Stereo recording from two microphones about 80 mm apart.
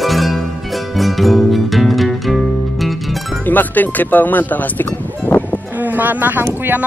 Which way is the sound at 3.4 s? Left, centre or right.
Left.